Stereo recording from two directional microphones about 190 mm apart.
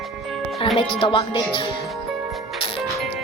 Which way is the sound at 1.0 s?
25° left (ahead or behind).